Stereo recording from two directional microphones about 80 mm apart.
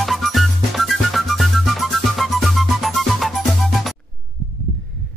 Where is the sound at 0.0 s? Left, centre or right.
Centre.